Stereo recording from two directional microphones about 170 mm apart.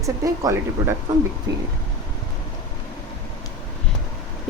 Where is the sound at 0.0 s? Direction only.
20° right (ahead or behind).